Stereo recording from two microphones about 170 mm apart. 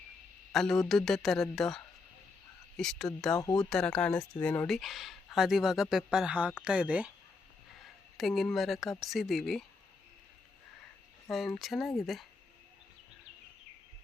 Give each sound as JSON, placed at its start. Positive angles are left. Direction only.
{"t": 0.5, "sound": "speech", "side_deg": 5}
{"t": 3.3, "sound": "speech", "side_deg": 20}
{"t": 3.6, "sound": "speech", "side_deg": 5}
{"t": 11.3, "sound": "speech", "side_deg": 0}